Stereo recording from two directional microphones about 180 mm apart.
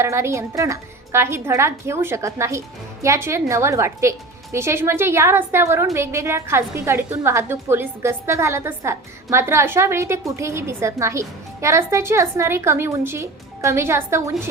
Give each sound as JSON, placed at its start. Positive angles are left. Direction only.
{"t": 0.0, "sound": "a woman's voice", "side_deg": -15}